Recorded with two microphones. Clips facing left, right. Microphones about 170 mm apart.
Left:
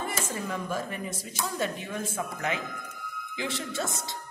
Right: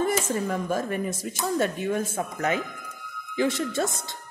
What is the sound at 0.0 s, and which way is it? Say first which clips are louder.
A woman's voice: right 8 dB; 45° right (ahead or behind).